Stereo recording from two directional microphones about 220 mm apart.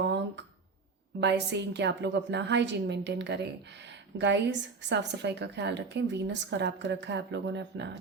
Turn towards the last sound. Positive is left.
turn(degrees=-50)  # may be behind; listen again after turning